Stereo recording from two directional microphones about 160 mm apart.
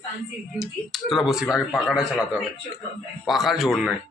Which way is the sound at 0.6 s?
Centre (ahead or behind).